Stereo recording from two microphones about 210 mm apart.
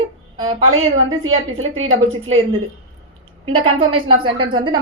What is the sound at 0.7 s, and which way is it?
A woman's voice, 75° right (ahead or behind).